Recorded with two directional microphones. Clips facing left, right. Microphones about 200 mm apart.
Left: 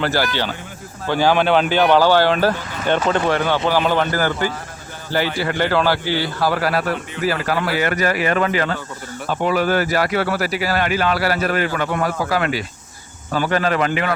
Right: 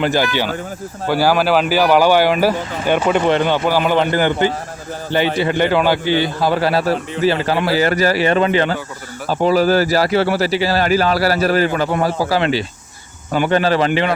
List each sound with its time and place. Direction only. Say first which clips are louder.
0.0 s a man's voice: right 3 dB; 20° right (ahead or behind)